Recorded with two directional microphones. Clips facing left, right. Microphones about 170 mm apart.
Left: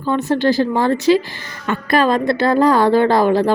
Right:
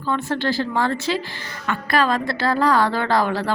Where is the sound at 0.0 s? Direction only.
20° left (ahead or behind).